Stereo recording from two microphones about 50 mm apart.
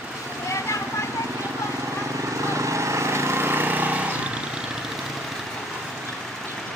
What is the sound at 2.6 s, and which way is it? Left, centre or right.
Vehicle, right.